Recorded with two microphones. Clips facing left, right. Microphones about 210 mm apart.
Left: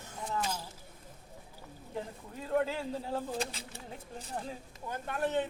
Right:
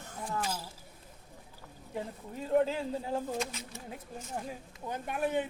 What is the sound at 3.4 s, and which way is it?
Speech, 30° left (ahead or behind).